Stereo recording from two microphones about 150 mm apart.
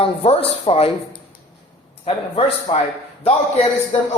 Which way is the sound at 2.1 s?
40° left (ahead or behind).